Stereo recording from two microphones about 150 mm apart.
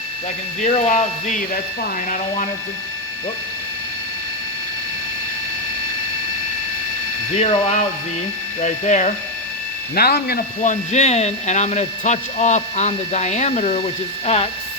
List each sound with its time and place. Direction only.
0.6 s speech: 55° left (ahead or behind)
7.3 s speech: 50° left (ahead or behind)
9.9 s speech: 90° left; by 13.8 s 50° left (ahead or behind)